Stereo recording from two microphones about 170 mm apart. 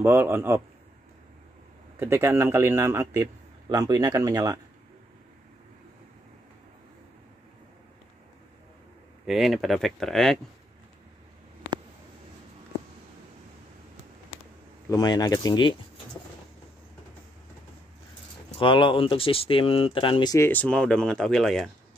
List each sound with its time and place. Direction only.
0.0 s a man's voice: 10° right (ahead or behind)
2.0 s a man's voice: 15° right (ahead or behind)
9.2 s speech: centre (ahead or behind)
14.9 s speech: 20° left (ahead or behind)
18.6 s speech: 30° left (ahead or behind)
20.3 s speech: 10° left (ahead or behind)